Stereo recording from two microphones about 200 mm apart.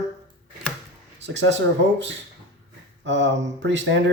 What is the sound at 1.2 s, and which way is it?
Speech, 65° right (ahead or behind).